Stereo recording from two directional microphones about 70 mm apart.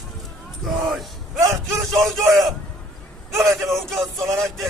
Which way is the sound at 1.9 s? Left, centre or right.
Centre.